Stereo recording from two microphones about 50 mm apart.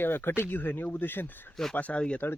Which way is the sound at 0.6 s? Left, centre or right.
Left.